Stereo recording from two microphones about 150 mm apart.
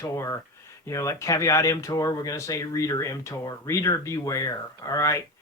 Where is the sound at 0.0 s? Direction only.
20° left (ahead or behind).